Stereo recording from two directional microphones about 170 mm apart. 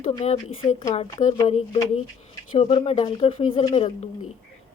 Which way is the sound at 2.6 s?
35° left (ahead or behind).